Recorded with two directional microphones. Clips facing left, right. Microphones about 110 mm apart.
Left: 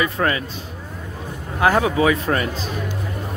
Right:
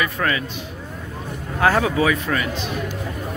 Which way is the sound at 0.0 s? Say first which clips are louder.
Left 2 dB; 25° left (ahead or behind).